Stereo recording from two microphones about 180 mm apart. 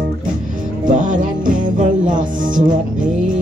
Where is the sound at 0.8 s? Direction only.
45° right (ahead or behind).